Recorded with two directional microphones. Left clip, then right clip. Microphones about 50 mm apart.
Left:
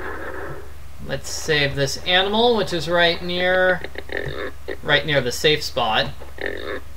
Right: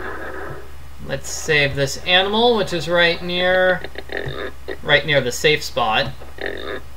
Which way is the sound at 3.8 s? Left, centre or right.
Left.